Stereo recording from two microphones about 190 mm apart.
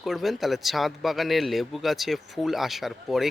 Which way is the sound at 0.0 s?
Centre (ahead or behind).